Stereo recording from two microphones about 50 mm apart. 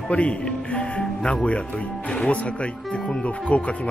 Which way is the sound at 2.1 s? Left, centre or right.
Left.